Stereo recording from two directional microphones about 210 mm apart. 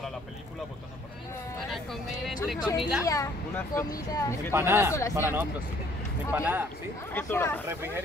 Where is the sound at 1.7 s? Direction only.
Centre (ahead or behind).